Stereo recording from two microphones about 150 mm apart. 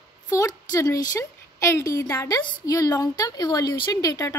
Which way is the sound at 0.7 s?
25° left (ahead or behind).